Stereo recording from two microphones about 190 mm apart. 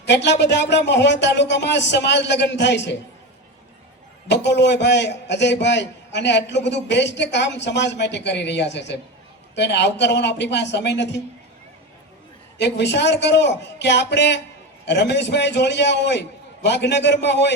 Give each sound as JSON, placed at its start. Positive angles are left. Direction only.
{"t": 0.1, "sound": "a man's voice", "side_deg": 65}
{"t": 4.3, "sound": "a man's voice", "side_deg": 65}
{"t": 12.5, "sound": "a man's voice", "side_deg": 65}